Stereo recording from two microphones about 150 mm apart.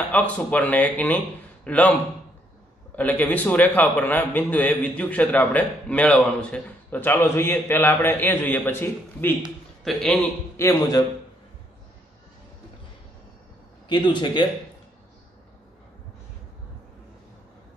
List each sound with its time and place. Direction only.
0.1 s a man's voice: 10° left (ahead or behind)
3.0 s a man's voice: 10° left (ahead or behind)
10.6 s a man's voice: 15° left (ahead or behind)
13.8 s a man's voice: 30° left (ahead or behind)